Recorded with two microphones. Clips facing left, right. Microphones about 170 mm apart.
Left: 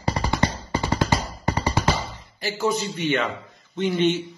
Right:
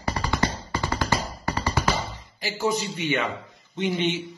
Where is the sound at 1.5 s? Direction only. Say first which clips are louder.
Left 3 dB; 20° left (ahead or behind).